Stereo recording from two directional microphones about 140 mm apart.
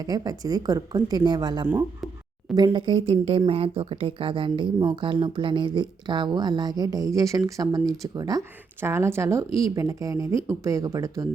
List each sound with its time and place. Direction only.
0.0 s speech: 25° right (ahead or behind)
2.7 s a woman's voice: 35° right (ahead or behind)